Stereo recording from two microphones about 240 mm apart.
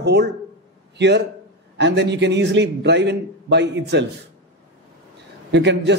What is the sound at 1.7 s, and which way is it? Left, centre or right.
A man's voice, right.